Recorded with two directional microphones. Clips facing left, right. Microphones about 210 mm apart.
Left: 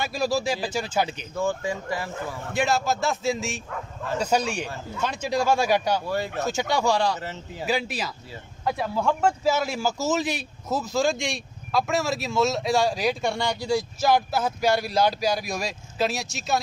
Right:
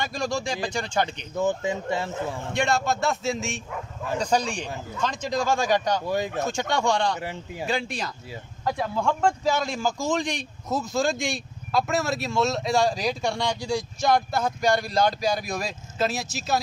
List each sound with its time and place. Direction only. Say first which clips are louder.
0.0 s speech: left 3 dB; 5° left (ahead or behind)
1.3 s speech: right 3 dB; 20° right (ahead or behind)
2.5 s a man's voice: left 1 dB; 5° left (ahead or behind)
6.0 s a man's voice: right 1 dB; 15° right (ahead or behind)
6.4 s a man's voice: left 1 dB; 5° left (ahead or behind)
7.2 s a man's voice: right 2 dB; 15° right (ahead or behind)
7.6 s a man's voice: left 2 dB; 5° left (ahead or behind)